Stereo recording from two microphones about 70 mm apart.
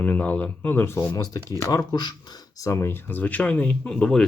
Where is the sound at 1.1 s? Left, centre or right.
Left.